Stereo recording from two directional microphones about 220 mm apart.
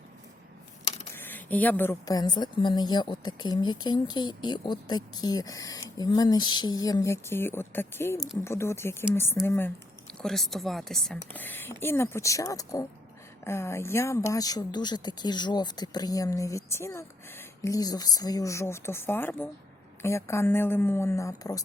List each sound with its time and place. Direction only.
1.1 s a woman's voice: 10° left (ahead or behind)